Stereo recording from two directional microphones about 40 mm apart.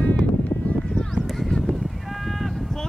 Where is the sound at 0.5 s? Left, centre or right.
Left.